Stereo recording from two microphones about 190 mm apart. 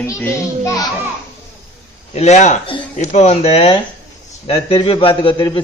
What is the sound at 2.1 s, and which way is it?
A man's voice, 35° left (ahead or behind).